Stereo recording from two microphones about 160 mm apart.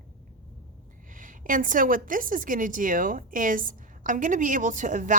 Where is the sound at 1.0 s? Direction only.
55° right (ahead or behind).